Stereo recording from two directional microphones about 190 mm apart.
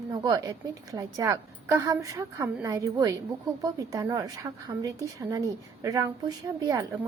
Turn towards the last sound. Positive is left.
turn(degrees=-20)  # may be behind; listen again after turning